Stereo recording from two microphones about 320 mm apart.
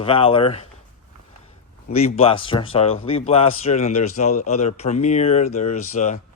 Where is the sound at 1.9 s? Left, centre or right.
Centre.